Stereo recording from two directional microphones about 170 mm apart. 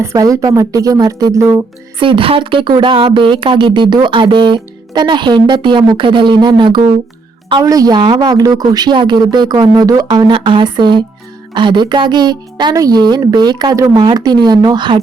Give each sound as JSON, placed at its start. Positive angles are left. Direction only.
{"t": 0.0, "sound": "speech", "side_deg": -20}
{"t": 2.0, "sound": "speech", "side_deg": -30}